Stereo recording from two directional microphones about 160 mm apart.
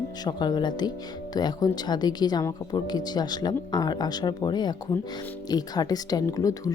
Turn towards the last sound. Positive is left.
turn(degrees=20)  # may be behind; listen again after turning